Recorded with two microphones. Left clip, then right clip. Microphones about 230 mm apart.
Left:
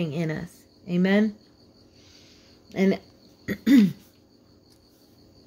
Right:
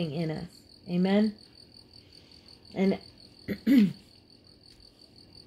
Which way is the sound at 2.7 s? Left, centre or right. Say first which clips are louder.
Left 4 dB; left.